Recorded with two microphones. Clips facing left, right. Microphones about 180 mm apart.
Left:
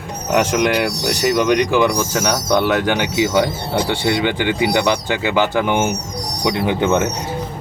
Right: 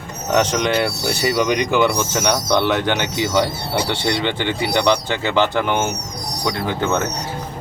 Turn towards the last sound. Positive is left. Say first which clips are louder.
# left 4 dB
turn(degrees=15)  # may be behind; listen again after turning